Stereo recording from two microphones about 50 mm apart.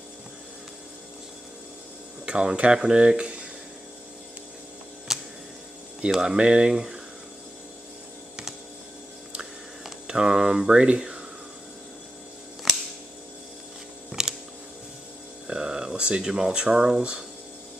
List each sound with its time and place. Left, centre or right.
2.2 s speech: centre
5.1 s tick-tock: centre
6.2 s speech: centre
9.4 s a sound: centre
14.2 s a sound: centre
15.4 s speech: centre